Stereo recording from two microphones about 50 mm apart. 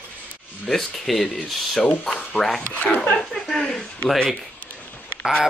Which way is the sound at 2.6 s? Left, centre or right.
Left.